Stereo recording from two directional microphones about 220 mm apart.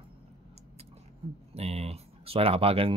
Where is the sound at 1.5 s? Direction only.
30° right (ahead or behind).